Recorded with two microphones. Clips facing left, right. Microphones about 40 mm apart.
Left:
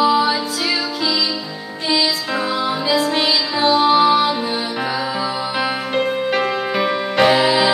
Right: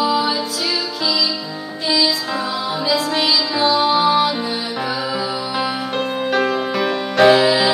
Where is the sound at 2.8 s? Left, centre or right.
Left.